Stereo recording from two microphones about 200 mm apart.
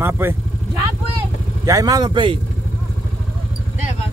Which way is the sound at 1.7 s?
20° right (ahead or behind).